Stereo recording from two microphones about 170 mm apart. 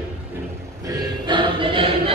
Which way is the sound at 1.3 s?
30° right (ahead or behind).